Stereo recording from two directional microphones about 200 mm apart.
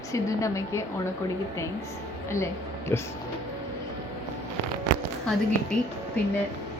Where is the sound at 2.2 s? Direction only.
15° left (ahead or behind).